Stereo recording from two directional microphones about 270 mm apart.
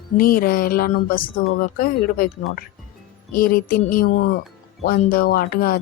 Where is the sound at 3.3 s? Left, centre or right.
Left.